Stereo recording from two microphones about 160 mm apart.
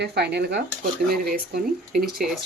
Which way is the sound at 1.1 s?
70° right (ahead or behind).